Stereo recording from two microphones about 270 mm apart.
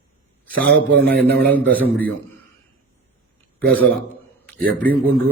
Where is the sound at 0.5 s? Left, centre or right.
Right.